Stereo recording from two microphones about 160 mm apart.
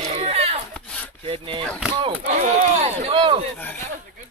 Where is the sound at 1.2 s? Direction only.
35° right (ahead or behind).